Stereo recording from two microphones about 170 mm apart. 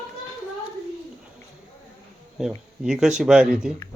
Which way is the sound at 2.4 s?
5° right (ahead or behind).